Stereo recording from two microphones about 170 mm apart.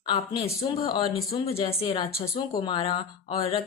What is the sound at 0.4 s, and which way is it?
Speech, 20° left (ahead or behind).